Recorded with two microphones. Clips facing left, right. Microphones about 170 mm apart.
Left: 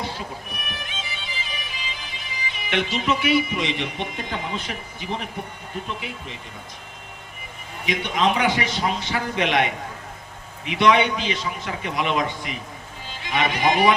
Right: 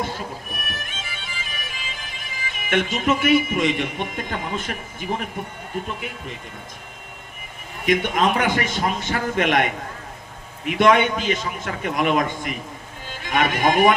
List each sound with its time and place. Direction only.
0.0 s music: 50° right (ahead or behind)
5.7 s a man's voice: 50° right (ahead or behind)
7.9 s a man's voice: 50° right (ahead or behind)